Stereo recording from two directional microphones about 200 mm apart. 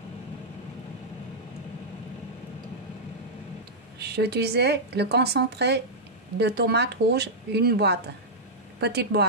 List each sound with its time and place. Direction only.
4.0 s a woman's voice: 55° right (ahead or behind)